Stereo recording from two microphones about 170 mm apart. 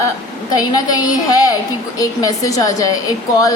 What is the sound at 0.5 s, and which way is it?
A woman's voice, 25° left (ahead or behind).